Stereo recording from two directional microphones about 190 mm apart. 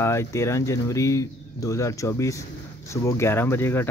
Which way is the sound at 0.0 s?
15° left (ahead or behind).